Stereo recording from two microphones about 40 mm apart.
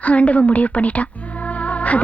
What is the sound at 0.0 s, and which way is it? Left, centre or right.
A woman's voice, left.